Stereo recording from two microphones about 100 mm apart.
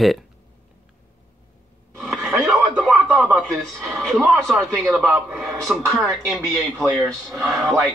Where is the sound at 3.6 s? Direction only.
Centre (ahead or behind).